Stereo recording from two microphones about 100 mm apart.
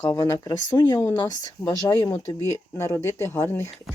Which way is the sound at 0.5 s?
45° left (ahead or behind).